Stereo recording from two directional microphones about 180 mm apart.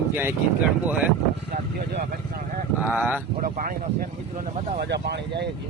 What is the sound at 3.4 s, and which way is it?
Speech, 55° right (ahead or behind).